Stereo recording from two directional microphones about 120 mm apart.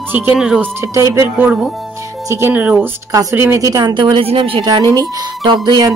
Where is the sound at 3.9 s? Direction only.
40° right (ahead or behind).